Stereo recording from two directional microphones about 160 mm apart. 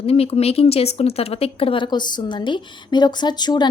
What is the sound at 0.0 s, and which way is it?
A woman's voice, 40° left (ahead or behind).